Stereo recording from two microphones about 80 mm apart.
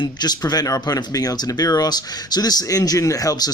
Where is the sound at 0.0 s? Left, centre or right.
Left.